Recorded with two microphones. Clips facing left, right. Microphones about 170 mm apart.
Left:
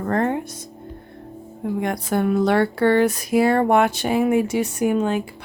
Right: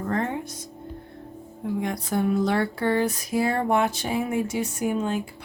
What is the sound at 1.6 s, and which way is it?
Speech, 65° left (ahead or behind).